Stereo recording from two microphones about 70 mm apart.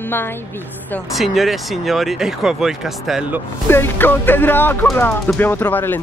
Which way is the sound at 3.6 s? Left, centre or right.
Left.